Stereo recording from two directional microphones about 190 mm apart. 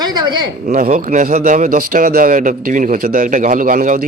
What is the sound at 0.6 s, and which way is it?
Speech, 45° right (ahead or behind).